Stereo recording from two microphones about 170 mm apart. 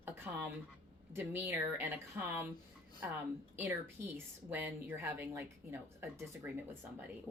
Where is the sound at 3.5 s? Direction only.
15° right (ahead or behind).